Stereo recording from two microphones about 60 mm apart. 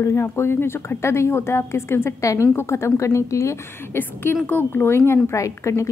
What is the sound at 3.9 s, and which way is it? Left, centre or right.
A woman's voice, left.